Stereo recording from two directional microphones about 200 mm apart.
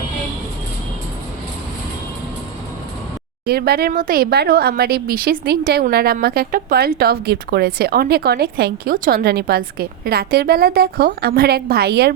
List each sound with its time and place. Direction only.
3.4 s speech: 50° right (ahead or behind)